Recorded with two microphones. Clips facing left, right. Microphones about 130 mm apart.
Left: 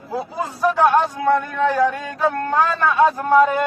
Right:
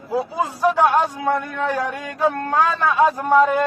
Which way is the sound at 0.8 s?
15° right (ahead or behind).